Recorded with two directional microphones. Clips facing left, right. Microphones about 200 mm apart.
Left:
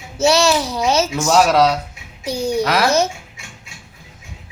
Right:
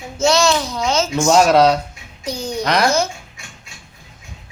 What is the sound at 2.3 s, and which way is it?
Speech, 30° left (ahead or behind).